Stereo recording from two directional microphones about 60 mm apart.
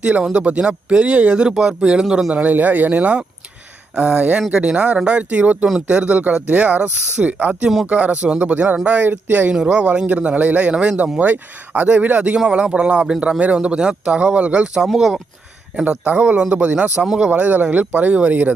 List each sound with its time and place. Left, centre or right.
0.0 s speech: centre
9.5 s speech: centre
15.7 s speech: centre